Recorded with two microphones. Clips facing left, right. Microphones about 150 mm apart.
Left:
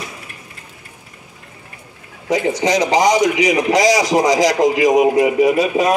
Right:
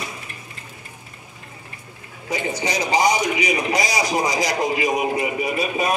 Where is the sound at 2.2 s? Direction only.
90° left.